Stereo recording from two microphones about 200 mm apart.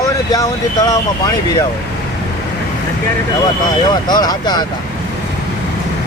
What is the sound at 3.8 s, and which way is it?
Speech, 20° left (ahead or behind).